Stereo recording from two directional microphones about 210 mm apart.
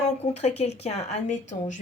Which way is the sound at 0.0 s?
30° left (ahead or behind).